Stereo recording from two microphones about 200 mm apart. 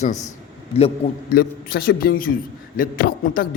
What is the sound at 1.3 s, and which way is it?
Speech, 50° left (ahead or behind).